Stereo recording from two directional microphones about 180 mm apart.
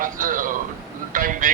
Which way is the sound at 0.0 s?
50° right (ahead or behind).